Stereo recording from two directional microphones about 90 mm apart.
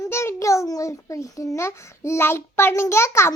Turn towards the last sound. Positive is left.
turn(degrees=30)  # may be behind; listen again after turning